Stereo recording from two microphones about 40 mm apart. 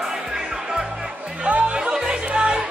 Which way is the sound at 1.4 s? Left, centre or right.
Right.